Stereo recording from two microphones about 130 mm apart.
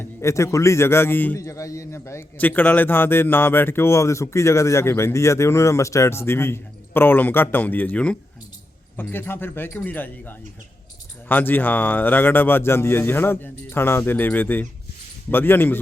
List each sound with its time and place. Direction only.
0.0 s a man's voice: 20° left (ahead or behind)